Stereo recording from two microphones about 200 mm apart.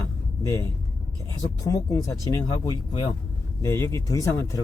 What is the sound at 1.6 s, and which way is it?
Speech, 15° left (ahead or behind).